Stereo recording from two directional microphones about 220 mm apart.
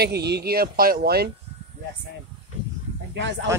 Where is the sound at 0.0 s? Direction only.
50° right (ahead or behind).